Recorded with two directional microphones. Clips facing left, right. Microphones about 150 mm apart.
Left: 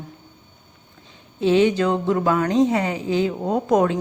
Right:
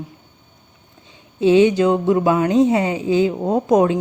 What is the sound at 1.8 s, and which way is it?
A woman's voice, 20° right (ahead or behind).